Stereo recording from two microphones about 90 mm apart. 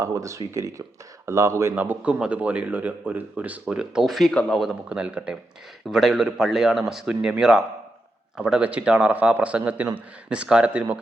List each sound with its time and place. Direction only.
0.0 s speech: 35° right (ahead or behind)
1.7 s a man's voice: 20° right (ahead or behind); by 4.8 s centre (ahead or behind)
4.9 s a man's voice: 15° right (ahead or behind)
5.9 s a man's voice: 5° right (ahead or behind)